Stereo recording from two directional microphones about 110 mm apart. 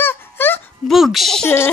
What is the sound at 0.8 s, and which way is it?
Speech, centre (ahead or behind).